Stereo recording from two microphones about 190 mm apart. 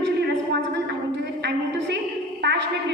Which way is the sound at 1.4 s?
65° right (ahead or behind).